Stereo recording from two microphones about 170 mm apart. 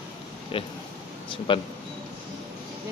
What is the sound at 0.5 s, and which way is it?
Oink, 30° left (ahead or behind).